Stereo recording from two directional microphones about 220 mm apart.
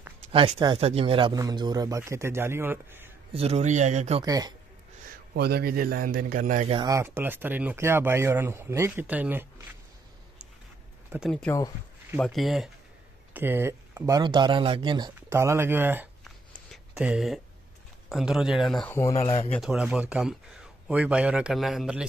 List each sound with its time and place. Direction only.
0.3 s speech: 20° right (ahead or behind)
3.3 s a man's voice: 30° right (ahead or behind)
4.2 s speech: 20° right (ahead or behind)
5.3 s a man's voice: 45° right (ahead or behind); by 6.9 s 25° right (ahead or behind)
6.9 s speech: 10° right (ahead or behind)
11.1 s speech: 5° right (ahead or behind)
11.4 s speech: 15° left (ahead or behind)
12.2 s a man's voice: centre (ahead or behind)
16.3 s a sound: centre (ahead or behind)
18.1 s a man's voice: centre (ahead or behind)